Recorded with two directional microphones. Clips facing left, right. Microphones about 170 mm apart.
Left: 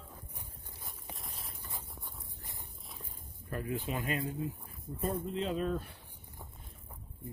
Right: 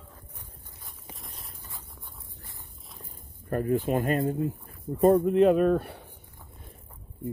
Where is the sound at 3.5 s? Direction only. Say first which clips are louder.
Right 11 dB; 50° right (ahead or behind); by 6.0 s 65° right (ahead or behind).